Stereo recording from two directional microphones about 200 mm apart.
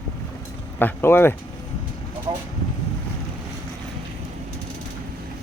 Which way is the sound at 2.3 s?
25° right (ahead or behind).